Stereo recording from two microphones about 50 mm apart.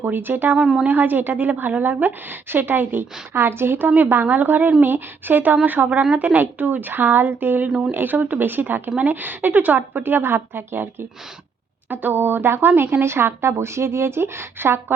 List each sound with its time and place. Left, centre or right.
0.0 s a woman's voice: right
0.6 s a woman's voice: centre
0.9 s a woman's voice: right
11.9 s a woman's voice: right